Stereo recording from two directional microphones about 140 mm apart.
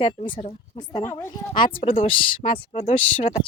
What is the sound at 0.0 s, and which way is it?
Speech, 35° left (ahead or behind).